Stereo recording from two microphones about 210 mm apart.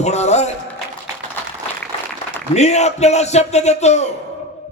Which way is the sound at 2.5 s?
30° left (ahead or behind).